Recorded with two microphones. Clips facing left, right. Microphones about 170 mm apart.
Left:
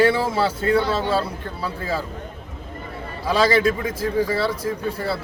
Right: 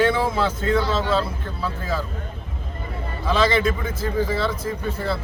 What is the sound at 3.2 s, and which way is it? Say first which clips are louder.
A man's voice: left 2 dB; 10° left (ahead or behind).